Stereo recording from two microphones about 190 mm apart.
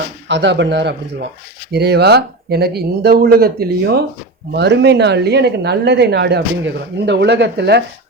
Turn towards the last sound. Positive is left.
turn(degrees=-60)  # may be behind; listen again after turning